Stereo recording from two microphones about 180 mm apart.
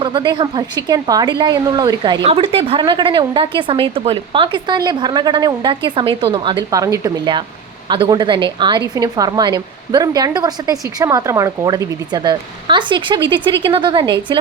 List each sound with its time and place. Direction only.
0.0 s a woman's voice: 25° right (ahead or behind)